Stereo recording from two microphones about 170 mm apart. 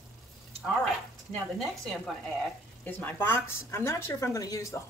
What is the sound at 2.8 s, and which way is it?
Speech, 15° left (ahead or behind).